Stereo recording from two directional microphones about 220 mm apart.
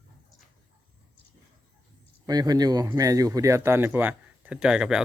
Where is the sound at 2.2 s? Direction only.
20° right (ahead or behind).